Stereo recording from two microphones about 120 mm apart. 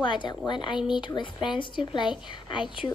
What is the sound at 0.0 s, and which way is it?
Speech, 40° left (ahead or behind).